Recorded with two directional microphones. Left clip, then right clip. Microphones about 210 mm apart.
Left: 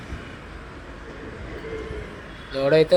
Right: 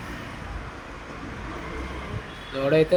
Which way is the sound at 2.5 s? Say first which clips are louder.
Left 3 dB; 30° left (ahead or behind).